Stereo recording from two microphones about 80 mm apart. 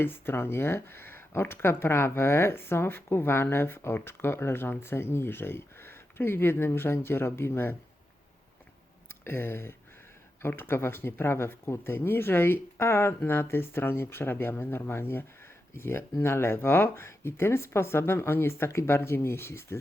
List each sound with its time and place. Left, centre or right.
0.0 s speech: left
9.2 s speech: left